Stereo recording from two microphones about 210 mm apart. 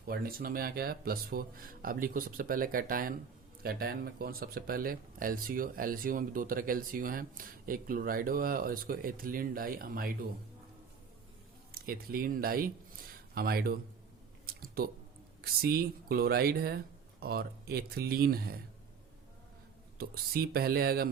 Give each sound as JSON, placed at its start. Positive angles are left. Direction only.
{"t": 0.0, "sound": "speech", "side_deg": -45}
{"t": 11.7, "sound": "speech", "side_deg": -45}
{"t": 14.4, "sound": "a sound", "side_deg": -45}
{"t": 15.6, "sound": "speech", "side_deg": -45}
{"t": 20.0, "sound": "speech", "side_deg": -45}